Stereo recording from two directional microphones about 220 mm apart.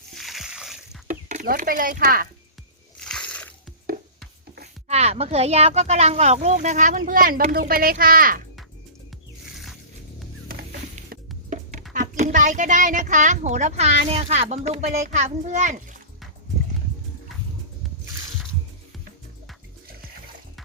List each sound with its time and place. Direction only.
0.1 s splash: centre (ahead or behind)
1.0 s speech: 35° right (ahead or behind)
3.0 s a sound: 5° left (ahead or behind)
4.9 s speech: 30° right (ahead or behind)
10.5 s music: 45° right (ahead or behind)
11.4 s music: 35° right (ahead or behind)
11.9 s speech: 35° right (ahead or behind)